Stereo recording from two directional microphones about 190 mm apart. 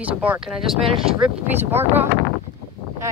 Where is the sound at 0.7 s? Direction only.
30° right (ahead or behind).